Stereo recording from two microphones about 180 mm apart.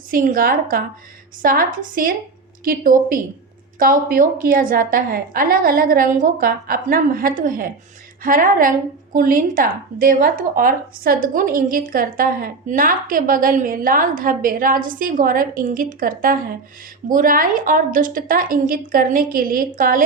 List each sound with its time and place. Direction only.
0.1 s speech: 50° right (ahead or behind)